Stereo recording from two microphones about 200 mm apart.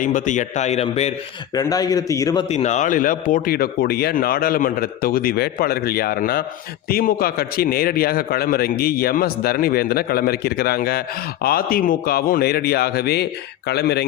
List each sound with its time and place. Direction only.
0.0 s a man's voice: 40° left (ahead or behind)
1.5 s a man's voice: 20° left (ahead or behind)
2.5 s a man's voice: 35° left (ahead or behind); by 14.1 s 55° left (ahead or behind)